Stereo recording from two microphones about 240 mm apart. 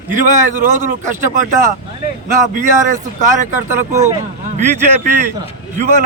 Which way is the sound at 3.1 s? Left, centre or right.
Right.